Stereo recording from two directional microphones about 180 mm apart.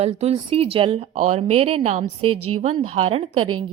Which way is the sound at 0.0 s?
35° right (ahead or behind).